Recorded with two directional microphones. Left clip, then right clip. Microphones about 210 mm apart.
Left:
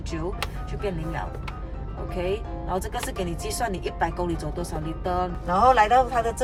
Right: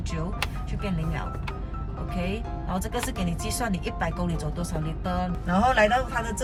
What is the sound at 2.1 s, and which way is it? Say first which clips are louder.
Speech: left 5 dB; 50° left (ahead or behind).